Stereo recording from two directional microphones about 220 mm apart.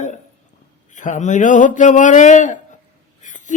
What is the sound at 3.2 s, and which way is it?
Whispering, 35° left (ahead or behind).